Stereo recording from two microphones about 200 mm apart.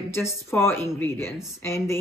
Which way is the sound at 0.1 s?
15° left (ahead or behind).